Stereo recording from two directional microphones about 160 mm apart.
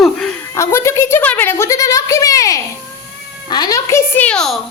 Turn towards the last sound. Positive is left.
turn(degrees=5)  # may be behind; listen again after turning